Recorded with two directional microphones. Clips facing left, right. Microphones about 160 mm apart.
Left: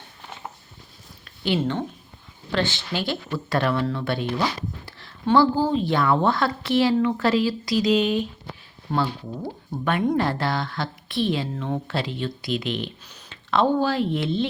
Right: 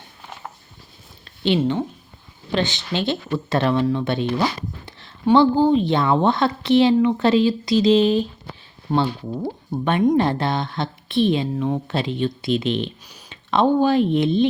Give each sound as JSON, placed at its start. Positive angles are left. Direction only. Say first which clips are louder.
{"t": 1.5, "sound": "speech", "louder": "right 2 dB", "side_deg": -15}
{"t": 8.9, "sound": "speech", "louder": "right 4 dB", "side_deg": -15}